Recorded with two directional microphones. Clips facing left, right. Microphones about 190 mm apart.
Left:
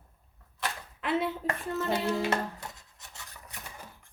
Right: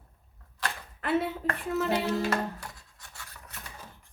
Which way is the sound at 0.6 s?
Centre (ahead or behind).